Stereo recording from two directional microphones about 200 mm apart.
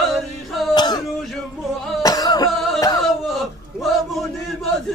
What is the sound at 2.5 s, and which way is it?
Music, centre (ahead or behind).